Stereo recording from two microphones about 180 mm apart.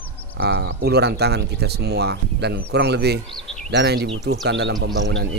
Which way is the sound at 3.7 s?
65° right (ahead or behind).